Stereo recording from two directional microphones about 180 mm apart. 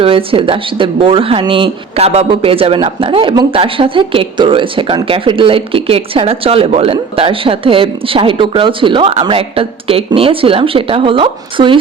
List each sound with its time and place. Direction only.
0.0 s speech: 30° right (ahead or behind)